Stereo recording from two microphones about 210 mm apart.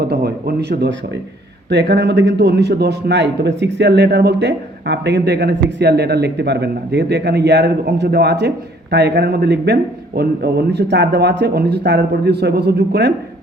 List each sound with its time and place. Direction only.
0.0 s a man's voice: 50° right (ahead or behind)